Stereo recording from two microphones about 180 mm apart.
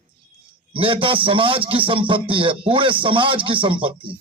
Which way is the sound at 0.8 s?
30° right (ahead or behind).